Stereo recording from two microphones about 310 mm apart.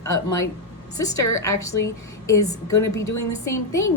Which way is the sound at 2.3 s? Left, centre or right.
Left.